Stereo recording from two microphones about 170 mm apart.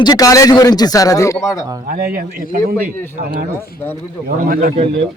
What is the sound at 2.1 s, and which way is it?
Speech, 60° right (ahead or behind).